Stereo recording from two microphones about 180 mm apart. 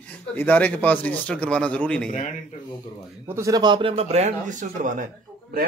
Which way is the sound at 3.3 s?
20° right (ahead or behind).